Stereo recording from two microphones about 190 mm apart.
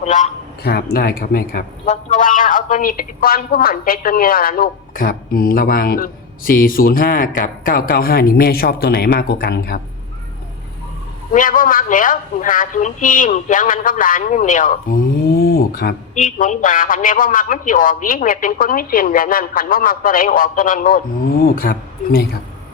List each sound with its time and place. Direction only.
0.0 s a man's voice: 40° left (ahead or behind)
0.6 s speech: 55° left (ahead or behind)
11.3 s speech: 45° left (ahead or behind)